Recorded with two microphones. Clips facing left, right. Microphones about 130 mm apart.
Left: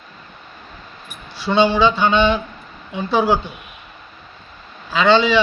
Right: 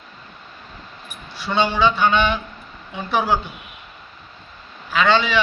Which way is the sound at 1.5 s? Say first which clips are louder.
Left 4 dB; 25° left (ahead or behind).